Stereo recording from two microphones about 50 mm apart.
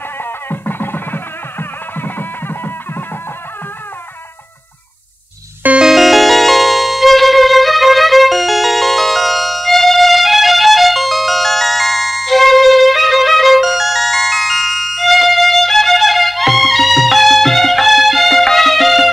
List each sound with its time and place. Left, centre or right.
0.2 s music: left
5.8 s music: centre